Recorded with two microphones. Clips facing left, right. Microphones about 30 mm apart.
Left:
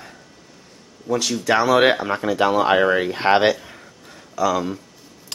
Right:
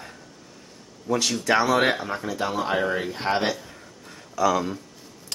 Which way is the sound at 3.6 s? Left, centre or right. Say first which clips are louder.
Left 2 dB; left.